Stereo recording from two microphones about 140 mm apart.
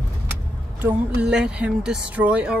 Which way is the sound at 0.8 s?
10° right (ahead or behind).